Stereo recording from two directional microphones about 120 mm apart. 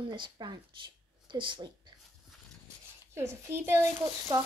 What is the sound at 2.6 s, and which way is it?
Writing, 25° right (ahead or behind).